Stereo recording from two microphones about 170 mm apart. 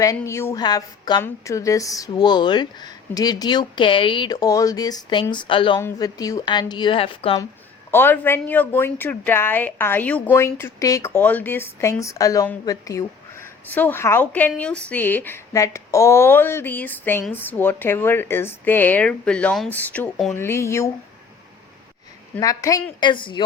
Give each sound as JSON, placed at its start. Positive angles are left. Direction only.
{"t": 0.0, "sound": "speech", "side_deg": 20}
{"t": 7.9, "sound": "speech", "side_deg": 15}
{"t": 13.7, "sound": "speech", "side_deg": 10}
{"t": 22.4, "sound": "speech", "side_deg": 20}